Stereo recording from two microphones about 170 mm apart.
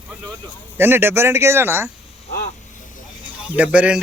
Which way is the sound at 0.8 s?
10° right (ahead or behind).